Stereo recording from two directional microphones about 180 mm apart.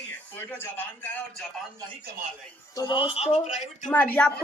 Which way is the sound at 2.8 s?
25° left (ahead or behind).